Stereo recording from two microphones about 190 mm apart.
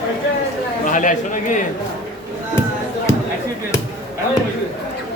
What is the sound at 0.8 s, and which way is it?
Speech, 40° left (ahead or behind).